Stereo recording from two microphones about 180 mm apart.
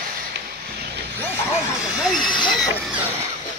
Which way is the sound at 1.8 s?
Centre (ahead or behind).